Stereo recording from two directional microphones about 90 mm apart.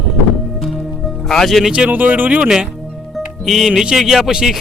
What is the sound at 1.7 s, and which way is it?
Speech, 15° right (ahead or behind).